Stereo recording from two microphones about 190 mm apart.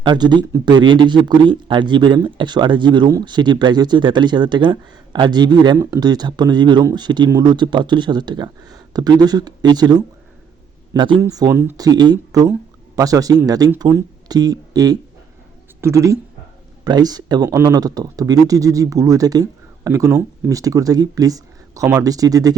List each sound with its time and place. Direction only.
0.0 s speech: 25° right (ahead or behind)